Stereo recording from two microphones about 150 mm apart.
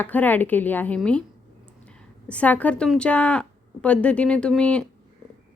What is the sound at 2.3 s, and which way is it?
A woman's voice, 10° left (ahead or behind).